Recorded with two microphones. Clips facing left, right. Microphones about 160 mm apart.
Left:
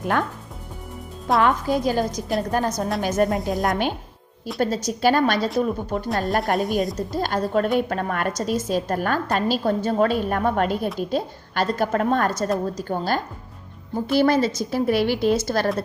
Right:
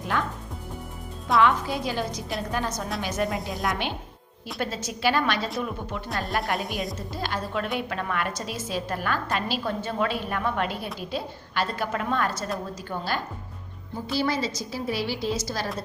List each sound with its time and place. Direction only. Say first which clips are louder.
0.0 s a woman's voice: left 5 dB; 50° left (ahead or behind)
1.4 s a woman's voice: left 2 dB; 45° left (ahead or behind)
14.1 s a woman's voice: left 8 dB; 55° left (ahead or behind)